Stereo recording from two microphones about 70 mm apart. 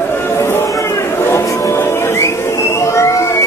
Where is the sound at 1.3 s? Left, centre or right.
Left.